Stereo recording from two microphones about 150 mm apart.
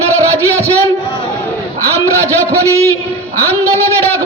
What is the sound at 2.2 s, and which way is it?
Speech, 20° right (ahead or behind).